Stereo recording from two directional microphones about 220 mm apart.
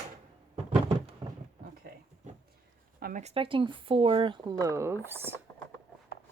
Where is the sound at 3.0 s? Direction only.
35° right (ahead or behind); by 5.4 s 10° right (ahead or behind).